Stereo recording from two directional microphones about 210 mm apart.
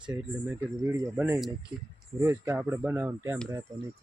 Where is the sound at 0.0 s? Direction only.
5° right (ahead or behind).